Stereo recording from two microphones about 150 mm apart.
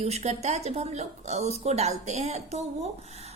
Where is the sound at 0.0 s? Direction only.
45° right (ahead or behind).